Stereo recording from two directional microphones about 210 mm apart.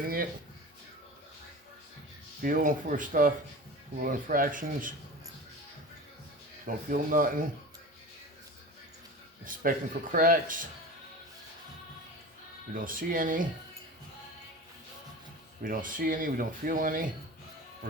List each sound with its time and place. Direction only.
2.4 s speech: 40° right (ahead or behind)
6.7 s speech: 40° right (ahead or behind)
9.4 s speech: 40° right (ahead or behind)
12.7 s speech: 40° right (ahead or behind)
15.6 s speech: 40° right (ahead or behind)